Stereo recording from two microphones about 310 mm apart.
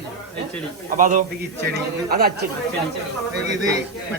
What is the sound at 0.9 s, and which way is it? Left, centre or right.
A man's voice, right.